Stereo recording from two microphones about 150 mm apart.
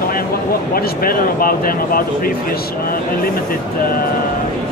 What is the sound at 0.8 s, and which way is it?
Speech, 75° left (ahead or behind).